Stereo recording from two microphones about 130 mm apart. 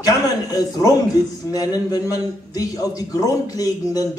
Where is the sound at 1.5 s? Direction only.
30° left (ahead or behind).